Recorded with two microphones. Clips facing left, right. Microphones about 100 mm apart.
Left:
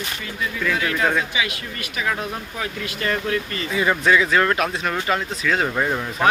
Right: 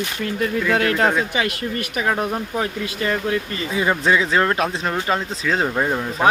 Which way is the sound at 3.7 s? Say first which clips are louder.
Even; 25° right (ahead or behind).